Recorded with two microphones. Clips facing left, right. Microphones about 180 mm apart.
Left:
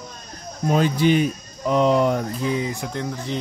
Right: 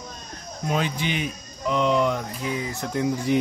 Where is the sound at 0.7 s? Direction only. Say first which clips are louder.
Left 8 dB; 40° left (ahead or behind).